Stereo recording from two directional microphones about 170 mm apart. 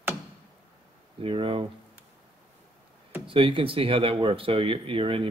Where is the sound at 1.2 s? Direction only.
30° right (ahead or behind).